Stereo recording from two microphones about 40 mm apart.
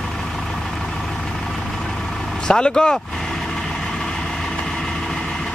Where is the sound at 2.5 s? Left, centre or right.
Left.